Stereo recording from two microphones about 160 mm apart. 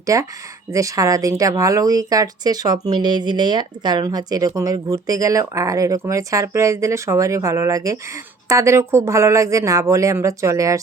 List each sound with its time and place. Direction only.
0.0 s speech: 20° right (ahead or behind)